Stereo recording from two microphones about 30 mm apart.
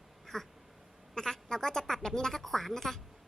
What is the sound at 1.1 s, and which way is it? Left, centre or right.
A woman's voice, centre.